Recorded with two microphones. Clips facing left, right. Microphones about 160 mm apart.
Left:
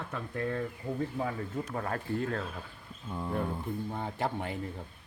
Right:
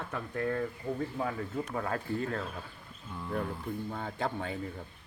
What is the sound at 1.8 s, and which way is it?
Speech, 40° left (ahead or behind).